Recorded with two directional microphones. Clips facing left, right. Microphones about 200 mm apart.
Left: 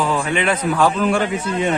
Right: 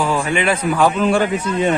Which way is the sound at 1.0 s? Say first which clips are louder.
Right 2 dB; 30° right (ahead or behind).